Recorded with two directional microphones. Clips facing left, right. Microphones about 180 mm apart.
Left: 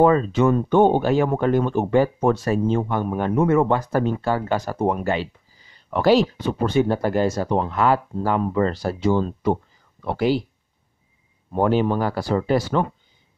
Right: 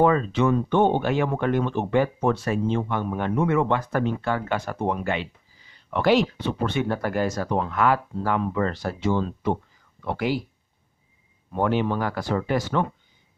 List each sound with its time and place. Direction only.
0.0 s speech: 40° left (ahead or behind)
11.5 s speech: 35° left (ahead or behind)